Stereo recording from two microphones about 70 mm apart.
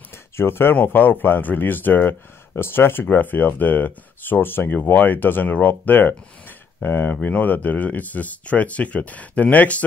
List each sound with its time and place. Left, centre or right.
0.4 s speech: left